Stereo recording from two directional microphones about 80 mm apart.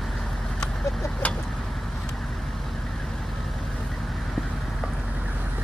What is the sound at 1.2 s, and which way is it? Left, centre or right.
Vehicle, centre.